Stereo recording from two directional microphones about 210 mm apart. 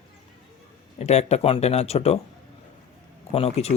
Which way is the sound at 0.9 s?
30° left (ahead or behind).